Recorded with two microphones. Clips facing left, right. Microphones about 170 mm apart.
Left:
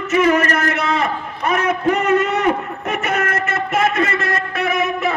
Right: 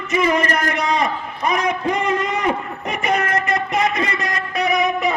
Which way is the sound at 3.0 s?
15° right (ahead or behind).